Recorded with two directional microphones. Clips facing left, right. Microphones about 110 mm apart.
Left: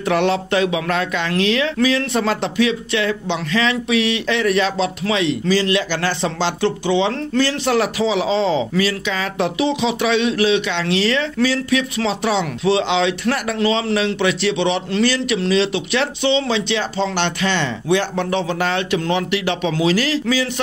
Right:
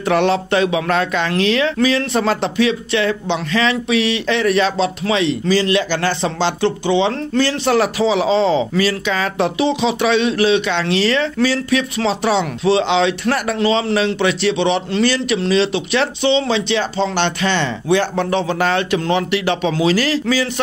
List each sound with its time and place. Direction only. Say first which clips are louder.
0.0 s speech: right 2 dB; 35° right (ahead or behind)